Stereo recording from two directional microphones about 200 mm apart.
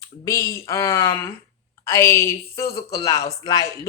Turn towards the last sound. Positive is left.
turn(degrees=20)  # may be behind; listen again after turning